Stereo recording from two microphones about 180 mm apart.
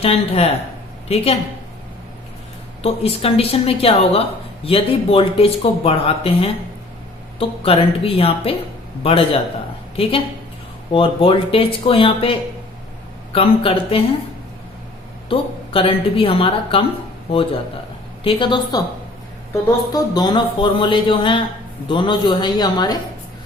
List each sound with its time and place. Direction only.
0.0 s speech: 35° left (ahead or behind)
2.8 s speech: 35° left (ahead or behind)
15.3 s speech: 30° left (ahead or behind)
18.2 s speech: 30° left (ahead or behind)
19.9 s speech: 20° left (ahead or behind)